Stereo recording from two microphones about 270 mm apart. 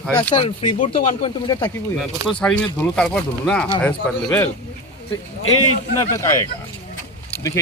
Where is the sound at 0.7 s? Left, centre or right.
Centre.